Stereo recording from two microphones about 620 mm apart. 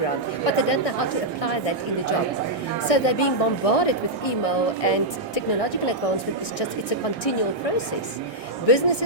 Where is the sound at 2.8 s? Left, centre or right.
Left.